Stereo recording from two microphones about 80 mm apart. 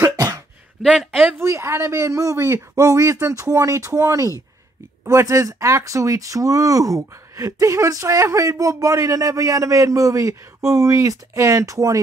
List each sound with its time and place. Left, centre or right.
0.8 s speech: centre
1.4 s speech: right